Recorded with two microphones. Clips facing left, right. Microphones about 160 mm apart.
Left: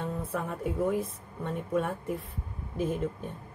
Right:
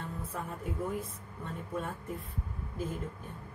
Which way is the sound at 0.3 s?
75° left (ahead or behind).